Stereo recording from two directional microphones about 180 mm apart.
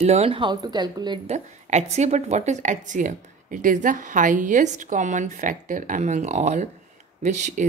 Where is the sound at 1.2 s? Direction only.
40° right (ahead or behind).